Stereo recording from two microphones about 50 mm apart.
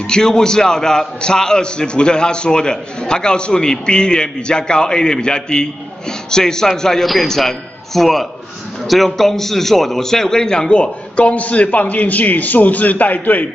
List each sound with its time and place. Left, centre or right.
0.0 s a man's voice: centre; by 13.5 s left